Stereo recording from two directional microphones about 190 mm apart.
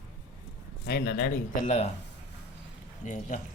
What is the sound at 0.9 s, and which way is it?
Speech, 55° left (ahead or behind).